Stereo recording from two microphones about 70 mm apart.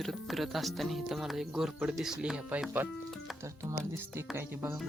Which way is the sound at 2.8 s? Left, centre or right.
Right.